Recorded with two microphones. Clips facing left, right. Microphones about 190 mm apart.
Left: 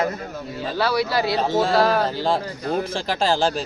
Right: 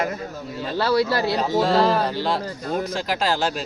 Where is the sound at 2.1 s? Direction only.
40° left (ahead or behind).